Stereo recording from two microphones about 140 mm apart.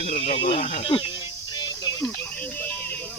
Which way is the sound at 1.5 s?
30° left (ahead or behind).